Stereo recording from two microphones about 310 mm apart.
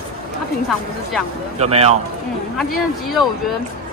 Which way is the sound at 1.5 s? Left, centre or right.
Centre.